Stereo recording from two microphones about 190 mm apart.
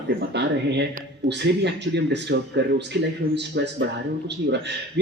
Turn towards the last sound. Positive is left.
turn(degrees=-65)  # may be behind; listen again after turning